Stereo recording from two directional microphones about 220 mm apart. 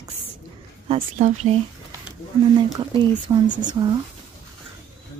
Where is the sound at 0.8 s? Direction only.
30° right (ahead or behind).